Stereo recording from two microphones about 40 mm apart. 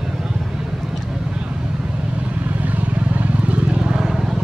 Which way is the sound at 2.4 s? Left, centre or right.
Right.